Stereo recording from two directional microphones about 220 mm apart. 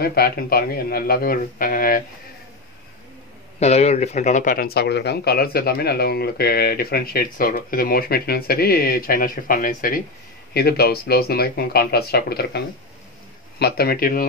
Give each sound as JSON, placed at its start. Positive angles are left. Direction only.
{"t": 0.0, "sound": "speech", "side_deg": 45}
{"t": 3.5, "sound": "speech", "side_deg": 30}